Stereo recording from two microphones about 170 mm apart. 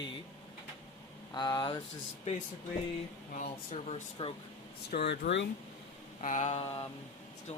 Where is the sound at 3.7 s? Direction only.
40° left (ahead or behind).